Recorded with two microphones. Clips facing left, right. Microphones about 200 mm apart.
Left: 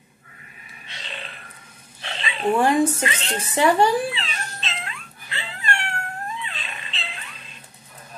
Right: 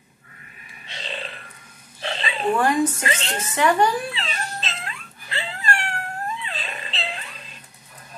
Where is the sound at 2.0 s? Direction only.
35° right (ahead or behind).